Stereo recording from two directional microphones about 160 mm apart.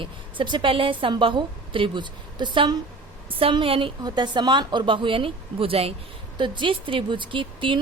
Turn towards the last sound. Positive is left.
turn(degrees=-30)  # may be behind; listen again after turning